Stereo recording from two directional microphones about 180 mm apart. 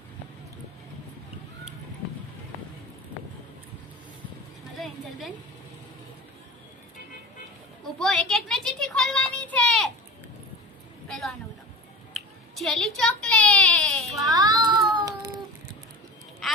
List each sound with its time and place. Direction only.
7.9 s child singing: centre (ahead or behind)
11.1 s a sound: centre (ahead or behind)
14.3 s child singing: 20° right (ahead or behind)